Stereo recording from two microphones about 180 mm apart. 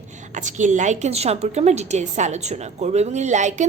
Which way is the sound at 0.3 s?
45° right (ahead or behind).